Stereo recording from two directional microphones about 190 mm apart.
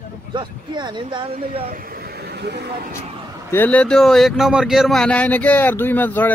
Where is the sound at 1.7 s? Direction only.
50° right (ahead or behind).